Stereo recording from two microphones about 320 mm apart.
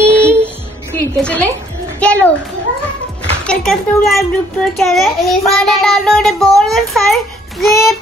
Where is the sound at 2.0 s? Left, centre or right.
Centre.